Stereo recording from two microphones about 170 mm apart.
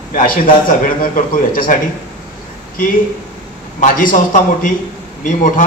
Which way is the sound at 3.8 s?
55° left (ahead or behind).